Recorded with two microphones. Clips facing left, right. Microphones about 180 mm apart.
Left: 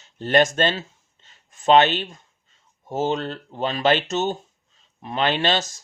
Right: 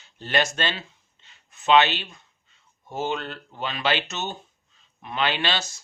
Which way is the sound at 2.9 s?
40° left (ahead or behind).